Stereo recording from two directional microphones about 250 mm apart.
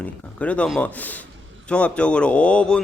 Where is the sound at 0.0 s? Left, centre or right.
Centre.